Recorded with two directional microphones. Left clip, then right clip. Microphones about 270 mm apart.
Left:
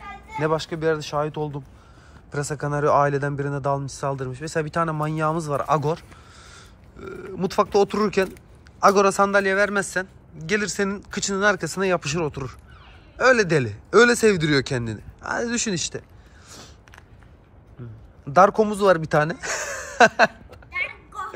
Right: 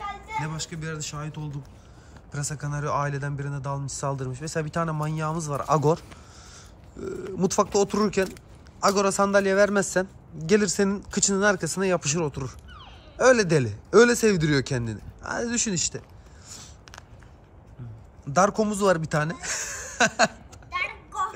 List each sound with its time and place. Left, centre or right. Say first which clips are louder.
0.4 s speech: left 15 dB; centre
5.8 s a man's voice: right 2 dB; centre
16.4 s a sound: left 1 dB; centre
18.3 s speech: left 6 dB; centre